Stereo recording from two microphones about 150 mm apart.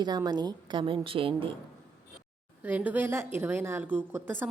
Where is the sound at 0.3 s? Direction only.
30° right (ahead or behind).